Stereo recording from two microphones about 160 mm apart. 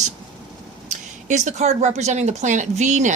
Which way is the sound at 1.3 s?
45° right (ahead or behind).